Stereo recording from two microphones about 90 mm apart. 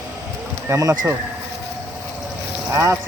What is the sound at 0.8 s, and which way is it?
Speech, 45° right (ahead or behind).